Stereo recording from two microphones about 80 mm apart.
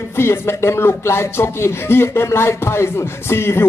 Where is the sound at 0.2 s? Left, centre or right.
Left.